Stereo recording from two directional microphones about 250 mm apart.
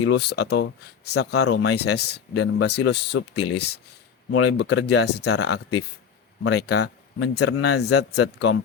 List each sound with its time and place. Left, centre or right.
0.0 s speech: left
3.2 s speech: left
4.4 s speech: left